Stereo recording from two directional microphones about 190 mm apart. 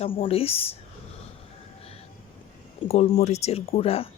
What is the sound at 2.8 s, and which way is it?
Speech, 30° left (ahead or behind).